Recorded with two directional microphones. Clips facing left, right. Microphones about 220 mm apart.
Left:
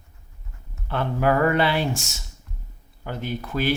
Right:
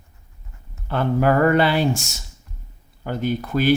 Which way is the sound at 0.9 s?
45° right (ahead or behind).